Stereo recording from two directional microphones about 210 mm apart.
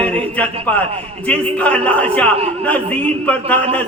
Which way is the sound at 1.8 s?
5° left (ahead or behind).